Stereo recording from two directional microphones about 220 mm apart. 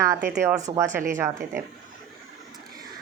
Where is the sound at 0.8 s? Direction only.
35° right (ahead or behind).